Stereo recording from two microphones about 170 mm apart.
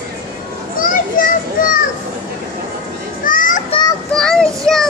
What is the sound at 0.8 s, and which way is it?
Children playing, 55° left (ahead or behind).